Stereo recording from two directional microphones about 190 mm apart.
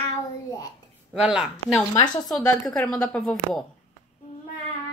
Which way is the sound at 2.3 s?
5° left (ahead or behind).